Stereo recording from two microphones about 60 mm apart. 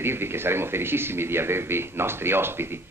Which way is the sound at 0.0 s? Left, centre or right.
Right.